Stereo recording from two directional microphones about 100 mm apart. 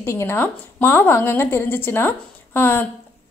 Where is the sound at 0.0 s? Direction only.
25° left (ahead or behind).